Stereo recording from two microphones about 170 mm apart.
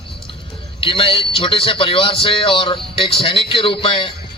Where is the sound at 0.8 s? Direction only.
30° left (ahead or behind).